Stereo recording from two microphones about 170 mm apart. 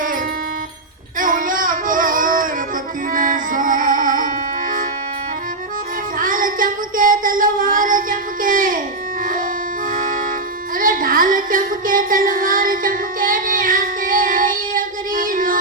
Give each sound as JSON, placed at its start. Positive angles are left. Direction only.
{"t": 1.2, "sound": "music", "side_deg": -55}
{"t": 6.1, "sound": "music", "side_deg": -55}
{"t": 9.9, "sound": "music", "side_deg": -50}
{"t": 10.8, "sound": "child singing", "side_deg": -55}